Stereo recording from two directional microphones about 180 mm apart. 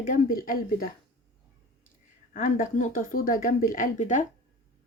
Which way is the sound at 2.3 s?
45° left (ahead or behind).